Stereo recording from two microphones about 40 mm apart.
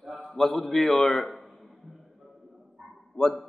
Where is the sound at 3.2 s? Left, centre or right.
Left.